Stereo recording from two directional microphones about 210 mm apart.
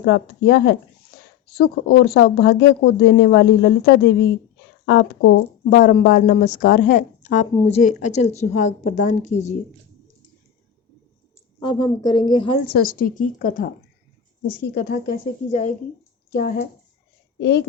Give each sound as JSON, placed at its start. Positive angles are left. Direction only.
{"t": 0.0, "sound": "a woman's voice", "side_deg": 55}
{"t": 11.6, "sound": "speech", "side_deg": 20}
{"t": 12.6, "sound": "speech", "side_deg": 45}
{"t": 16.3, "sound": "speech", "side_deg": 45}